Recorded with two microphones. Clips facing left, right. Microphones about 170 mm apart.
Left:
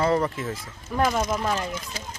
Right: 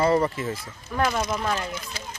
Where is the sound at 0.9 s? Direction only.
10° left (ahead or behind).